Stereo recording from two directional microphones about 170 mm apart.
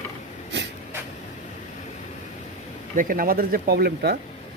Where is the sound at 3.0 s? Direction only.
55° right (ahead or behind).